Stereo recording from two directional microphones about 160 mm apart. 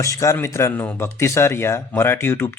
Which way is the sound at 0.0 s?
20° left (ahead or behind).